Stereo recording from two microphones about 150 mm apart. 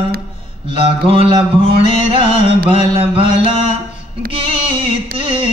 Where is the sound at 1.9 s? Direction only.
35° right (ahead or behind).